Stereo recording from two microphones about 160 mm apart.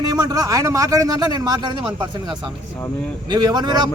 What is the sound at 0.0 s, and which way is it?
Speech, 25° right (ahead or behind).